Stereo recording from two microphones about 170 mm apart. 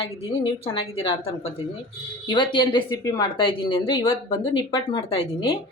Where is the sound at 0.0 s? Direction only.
35° left (ahead or behind).